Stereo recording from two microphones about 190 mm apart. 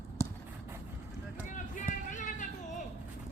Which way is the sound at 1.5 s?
40° left (ahead or behind).